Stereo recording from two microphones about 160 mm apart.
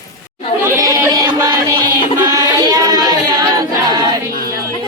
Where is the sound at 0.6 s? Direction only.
20° right (ahead or behind).